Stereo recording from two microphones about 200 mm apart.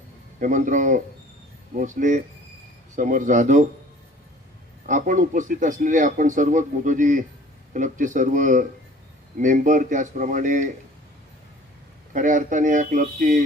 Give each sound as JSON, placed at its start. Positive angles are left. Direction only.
{"t": 0.3, "sound": "a man's voice", "side_deg": -40}
{"t": 4.9, "sound": "a man's voice", "side_deg": -40}
{"t": 12.1, "sound": "a man's voice", "side_deg": -40}